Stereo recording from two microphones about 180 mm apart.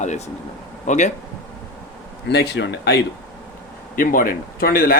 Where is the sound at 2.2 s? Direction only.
65° left (ahead or behind).